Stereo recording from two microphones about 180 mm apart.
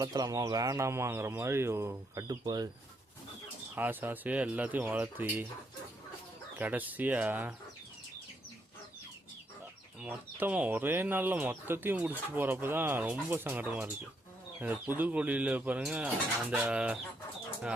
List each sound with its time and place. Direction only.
0.0 s speech: 20° right (ahead or behind)
3.8 s speech: 10° right (ahead or behind)
6.6 s speech: 10° right (ahead or behind)
10.0 s speech: 5° right (ahead or behind)